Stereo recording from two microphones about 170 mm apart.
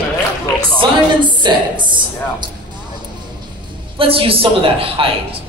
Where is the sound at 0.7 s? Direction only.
30° right (ahead or behind).